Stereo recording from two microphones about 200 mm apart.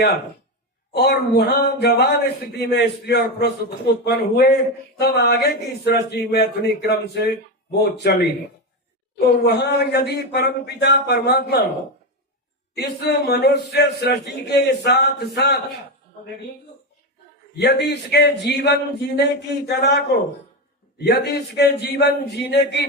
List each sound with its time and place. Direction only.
0.9 s a man's voice: 55° left (ahead or behind)
12.7 s a man's voice: 55° left (ahead or behind)
17.6 s a man's voice: 55° left (ahead or behind)